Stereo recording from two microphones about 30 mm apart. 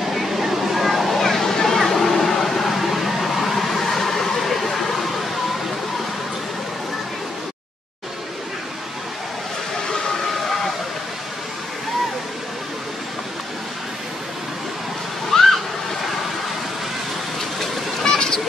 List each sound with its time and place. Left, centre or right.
0.1 s a sound: centre
15.3 s water: centre
18.0 s vehicle: left